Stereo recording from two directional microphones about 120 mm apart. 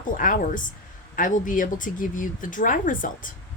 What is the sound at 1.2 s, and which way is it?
A woman's voice, 90° left.